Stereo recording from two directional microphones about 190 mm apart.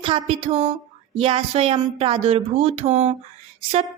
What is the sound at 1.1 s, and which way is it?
Speech, 30° right (ahead or behind).